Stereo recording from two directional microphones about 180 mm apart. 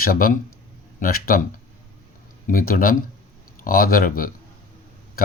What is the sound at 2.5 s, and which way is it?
A man's voice, 50° left (ahead or behind).